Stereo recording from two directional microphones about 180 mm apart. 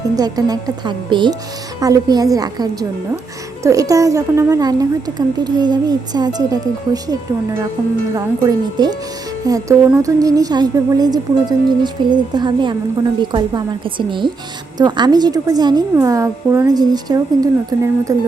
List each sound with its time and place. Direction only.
0.2 s a woman's voice: 20° right (ahead or behind)